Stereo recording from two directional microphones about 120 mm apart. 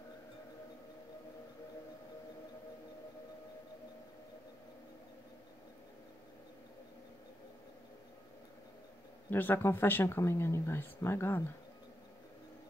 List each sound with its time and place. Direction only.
9.3 s speech: 15° left (ahead or behind)